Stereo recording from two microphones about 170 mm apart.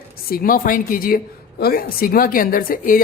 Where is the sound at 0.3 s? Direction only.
60° left (ahead or behind).